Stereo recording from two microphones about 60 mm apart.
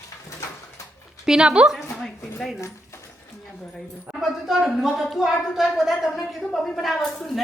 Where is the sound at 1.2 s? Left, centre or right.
Centre.